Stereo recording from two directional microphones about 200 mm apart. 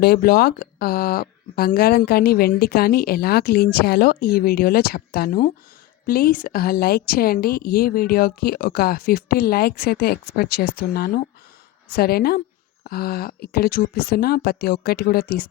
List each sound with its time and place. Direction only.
0.0 s speech: 50° left (ahead or behind)